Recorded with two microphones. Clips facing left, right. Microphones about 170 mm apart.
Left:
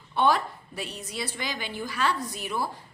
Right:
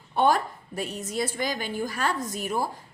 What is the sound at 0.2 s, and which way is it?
A woman's voice, 50° right (ahead or behind).